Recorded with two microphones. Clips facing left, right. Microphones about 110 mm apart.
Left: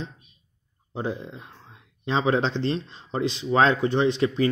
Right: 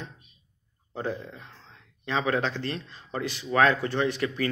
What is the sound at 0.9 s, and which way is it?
Speech, 15° left (ahead or behind).